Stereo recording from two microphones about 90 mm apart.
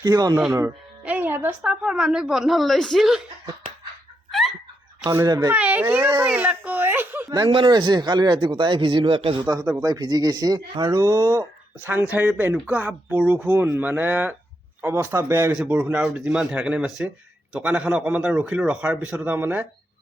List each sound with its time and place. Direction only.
0.0 s speech: 45° right (ahead or behind)
1.0 s music: 20° right (ahead or behind)
1.6 s a woman's voice: 10° right (ahead or behind)
4.3 s a sound: centre (ahead or behind)
5.5 s a man's voice: 15° right (ahead or behind)
7.3 s speech: 50° right (ahead or behind)
7.5 s speech: 65° right (ahead or behind)
9.5 s speech: 40° right (ahead or behind)
10.9 s speech: 35° right (ahead or behind)
11.9 s a man's voice: 20° right (ahead or behind)